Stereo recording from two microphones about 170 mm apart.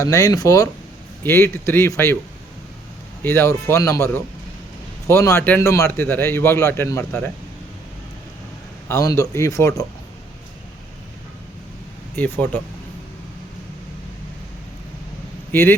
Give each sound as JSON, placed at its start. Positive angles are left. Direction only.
{"t": 0.0, "sound": "a man's voice", "side_deg": 20}
{"t": 3.2, "sound": "a man's voice", "side_deg": 15}
{"t": 8.9, "sound": "a man's voice", "side_deg": 20}
{"t": 12.1, "sound": "a man's voice", "side_deg": 10}